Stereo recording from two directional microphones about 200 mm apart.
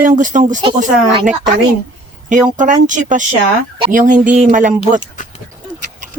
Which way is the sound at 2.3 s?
40° right (ahead or behind).